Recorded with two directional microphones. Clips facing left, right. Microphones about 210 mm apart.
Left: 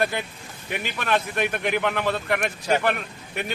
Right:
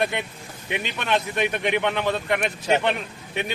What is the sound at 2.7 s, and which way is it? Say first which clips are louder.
Speech: right 1 dB; 20° right (ahead or behind).